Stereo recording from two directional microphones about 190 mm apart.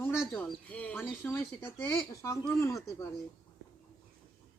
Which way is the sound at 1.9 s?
15° left (ahead or behind).